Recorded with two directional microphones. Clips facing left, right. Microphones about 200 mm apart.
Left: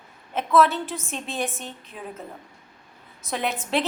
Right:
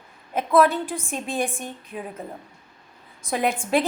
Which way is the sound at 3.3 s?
10° right (ahead or behind).